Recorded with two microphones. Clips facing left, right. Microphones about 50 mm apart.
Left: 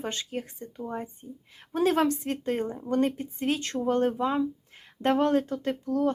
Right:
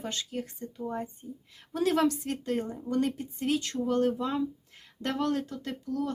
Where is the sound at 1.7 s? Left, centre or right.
Left.